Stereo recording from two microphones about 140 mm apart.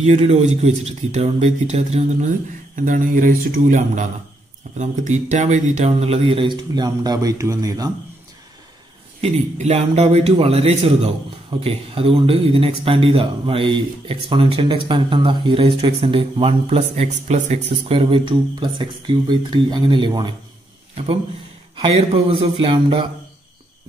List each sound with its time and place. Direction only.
0.0 s speech: 50° right (ahead or behind); by 7.9 s 25° right (ahead or behind)
9.2 s speech: 50° right (ahead or behind); by 20.3 s 35° right (ahead or behind)
20.9 s a man's voice: 50° right (ahead or behind)